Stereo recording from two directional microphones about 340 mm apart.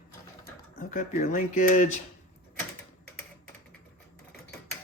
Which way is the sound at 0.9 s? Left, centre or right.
Left.